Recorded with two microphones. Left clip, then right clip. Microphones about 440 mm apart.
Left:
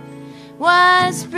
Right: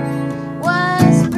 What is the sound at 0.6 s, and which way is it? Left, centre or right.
Music, left.